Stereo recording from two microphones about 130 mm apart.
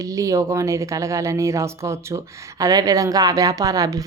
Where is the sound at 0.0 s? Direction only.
25° right (ahead or behind).